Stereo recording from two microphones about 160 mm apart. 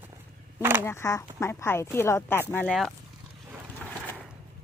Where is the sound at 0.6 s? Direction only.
15° right (ahead or behind).